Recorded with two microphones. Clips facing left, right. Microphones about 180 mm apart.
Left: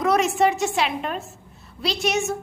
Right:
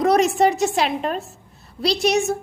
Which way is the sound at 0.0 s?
35° right (ahead or behind).